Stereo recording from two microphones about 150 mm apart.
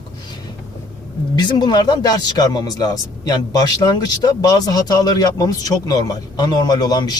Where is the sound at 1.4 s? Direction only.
30° left (ahead or behind).